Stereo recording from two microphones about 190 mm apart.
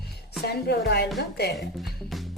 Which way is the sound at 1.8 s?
Centre (ahead or behind).